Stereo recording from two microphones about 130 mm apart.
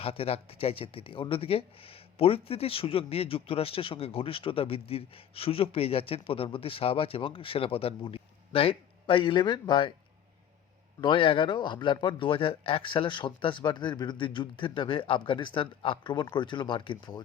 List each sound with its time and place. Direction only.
0.0 s speech: 45° left (ahead or behind)
11.0 s speech: 40° left (ahead or behind)